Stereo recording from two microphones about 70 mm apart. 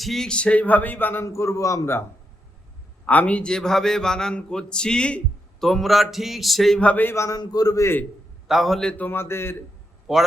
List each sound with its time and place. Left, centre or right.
0.0 s speech: centre; by 1.2 s left
1.2 s a man's voice: left
3.1 s speech: left; by 6.7 s centre
6.7 s speech: left
7.3 s a man's voice: left
8.4 s speech: centre
8.8 s speech: centre
9.0 s a man's voice: left
10.1 s speech: centre